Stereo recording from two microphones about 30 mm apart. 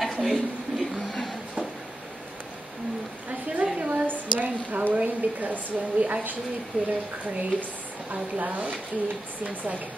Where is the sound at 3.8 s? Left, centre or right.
Right.